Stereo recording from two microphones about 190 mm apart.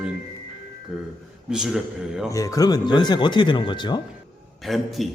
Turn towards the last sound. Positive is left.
turn(degrees=0)  # may be behind; listen again after turning